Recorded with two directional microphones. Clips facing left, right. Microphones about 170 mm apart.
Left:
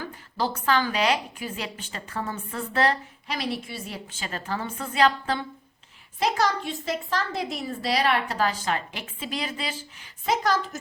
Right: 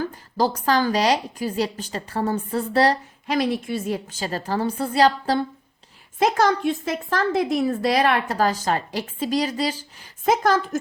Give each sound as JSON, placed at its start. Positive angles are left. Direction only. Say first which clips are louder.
{"t": 0.0, "sound": "a woman's voice", "louder": "right 6 dB", "side_deg": -40}
{"t": 6.1, "sound": "a woman's voice", "louder": "right 5 dB", "side_deg": -50}